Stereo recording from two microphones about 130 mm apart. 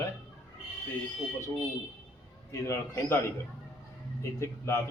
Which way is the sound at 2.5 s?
20° left (ahead or behind).